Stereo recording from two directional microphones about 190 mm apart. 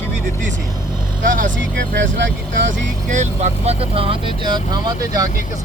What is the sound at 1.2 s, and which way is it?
Speech, 45° right (ahead or behind).